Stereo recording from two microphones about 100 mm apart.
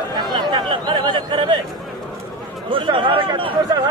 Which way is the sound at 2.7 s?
60° right (ahead or behind).